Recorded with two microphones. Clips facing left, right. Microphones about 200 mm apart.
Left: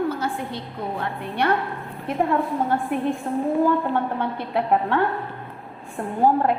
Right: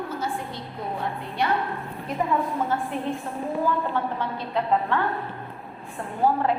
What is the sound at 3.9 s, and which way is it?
A woman's voice, 60° left (ahead or behind).